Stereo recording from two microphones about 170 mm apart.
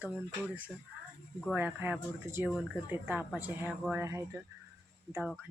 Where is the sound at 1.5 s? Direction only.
10° right (ahead or behind).